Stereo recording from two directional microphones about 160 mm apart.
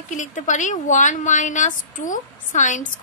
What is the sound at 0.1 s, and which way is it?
A woman's voice, 50° left (ahead or behind).